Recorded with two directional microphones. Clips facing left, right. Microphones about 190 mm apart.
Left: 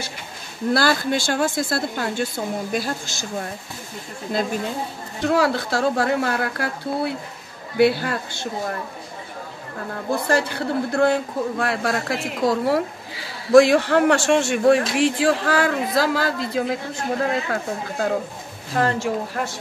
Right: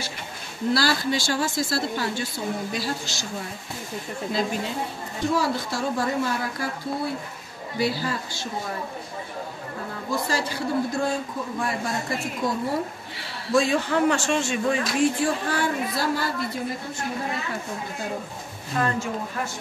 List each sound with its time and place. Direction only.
0.7 s speech: 55° left (ahead or behind)
5.2 s speech: 65° left (ahead or behind)
10.2 s speech: 60° left (ahead or behind); by 12.8 s 90° left
13.5 s a woman's voice: 75° left (ahead or behind)